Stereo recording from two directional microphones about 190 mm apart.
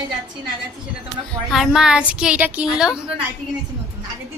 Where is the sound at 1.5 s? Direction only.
Centre (ahead or behind).